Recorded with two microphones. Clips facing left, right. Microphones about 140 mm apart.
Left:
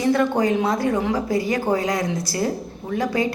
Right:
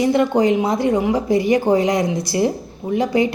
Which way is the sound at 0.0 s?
15° right (ahead or behind).